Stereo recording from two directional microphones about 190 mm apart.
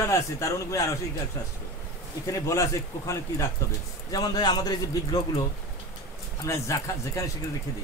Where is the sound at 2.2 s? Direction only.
15° left (ahead or behind).